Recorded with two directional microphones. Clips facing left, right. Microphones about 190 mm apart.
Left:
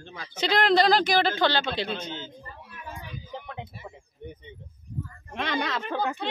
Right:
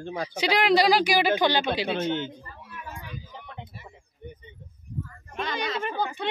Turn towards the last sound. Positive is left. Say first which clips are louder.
# even
turn(degrees=90)